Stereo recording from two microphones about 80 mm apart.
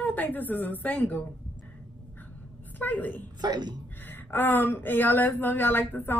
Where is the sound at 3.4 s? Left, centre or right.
Right.